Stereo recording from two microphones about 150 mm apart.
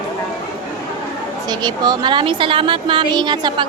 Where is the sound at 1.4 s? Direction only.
25° right (ahead or behind).